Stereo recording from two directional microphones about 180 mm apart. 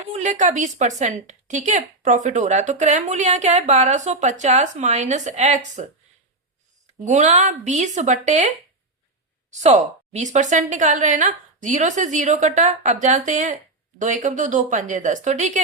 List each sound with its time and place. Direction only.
0.2 s a woman's voice: 45° right (ahead or behind)
7.0 s a woman's voice: 40° right (ahead or behind)
9.6 s a woman's voice: 40° right (ahead or behind)